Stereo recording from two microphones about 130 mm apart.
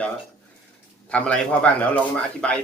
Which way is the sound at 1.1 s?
10° left (ahead or behind).